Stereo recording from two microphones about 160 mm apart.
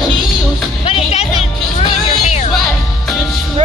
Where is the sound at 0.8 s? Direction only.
40° left (ahead or behind).